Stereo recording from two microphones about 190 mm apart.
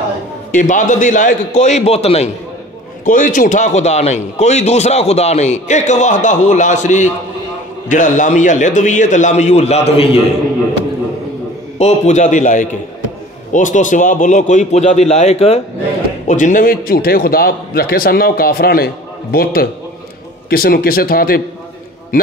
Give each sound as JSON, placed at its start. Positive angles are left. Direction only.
{"t": 0.5, "sound": "a man's voice", "side_deg": 40}
{"t": 11.8, "sound": "a man's voice", "side_deg": 40}